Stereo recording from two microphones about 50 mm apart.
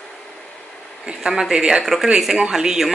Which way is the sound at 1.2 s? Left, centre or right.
Centre.